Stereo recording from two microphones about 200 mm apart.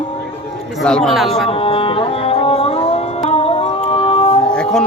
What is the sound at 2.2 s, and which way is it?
Music, 30° left (ahead or behind).